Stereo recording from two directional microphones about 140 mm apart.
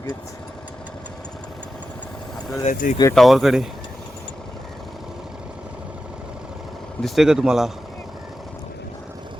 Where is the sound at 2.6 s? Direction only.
70° left (ahead or behind).